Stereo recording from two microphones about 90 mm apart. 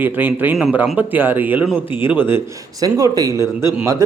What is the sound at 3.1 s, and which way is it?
Speech, 40° right (ahead or behind).